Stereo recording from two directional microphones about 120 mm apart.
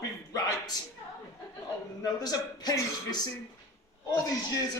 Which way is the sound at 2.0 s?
35° left (ahead or behind).